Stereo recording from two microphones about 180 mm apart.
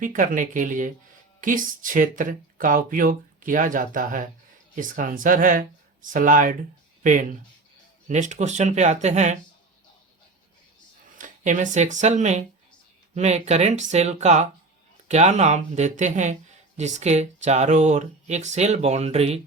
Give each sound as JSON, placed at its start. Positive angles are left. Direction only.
{"t": 0.0, "sound": "speech", "side_deg": -50}
{"t": 11.2, "sound": "speech", "side_deg": -45}